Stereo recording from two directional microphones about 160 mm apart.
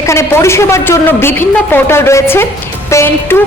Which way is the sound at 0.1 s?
15° left (ahead or behind).